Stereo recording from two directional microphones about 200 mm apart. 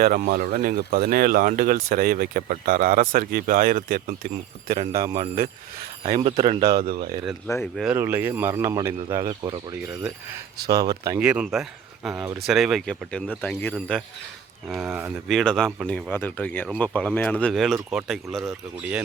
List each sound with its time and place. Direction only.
0.0 s speech: 45° right (ahead or behind)
6.1 s speech: 30° right (ahead or behind)
6.6 s speech: 50° right (ahead or behind)
7.4 s speech: 10° left (ahead or behind)
7.8 s speech: 10° right (ahead or behind)